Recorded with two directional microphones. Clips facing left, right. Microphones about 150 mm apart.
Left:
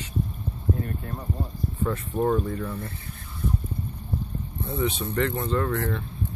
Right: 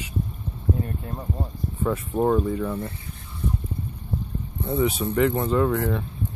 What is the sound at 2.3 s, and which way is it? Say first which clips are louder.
Speech: right 3 dB; 10° right (ahead or behind).